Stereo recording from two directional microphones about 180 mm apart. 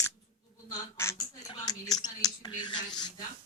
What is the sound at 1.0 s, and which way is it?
A woman's voice, 15° left (ahead or behind).